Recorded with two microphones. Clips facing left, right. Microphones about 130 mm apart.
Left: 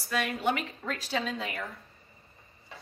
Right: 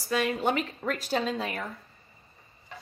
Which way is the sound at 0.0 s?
35° right (ahead or behind).